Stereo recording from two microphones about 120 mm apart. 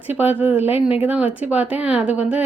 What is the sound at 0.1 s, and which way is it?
A woman's voice, 15° right (ahead or behind).